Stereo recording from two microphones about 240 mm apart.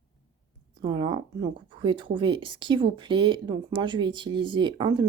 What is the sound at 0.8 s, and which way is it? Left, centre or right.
Speech, centre.